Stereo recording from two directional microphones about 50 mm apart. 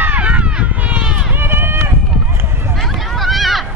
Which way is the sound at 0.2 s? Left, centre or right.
Right.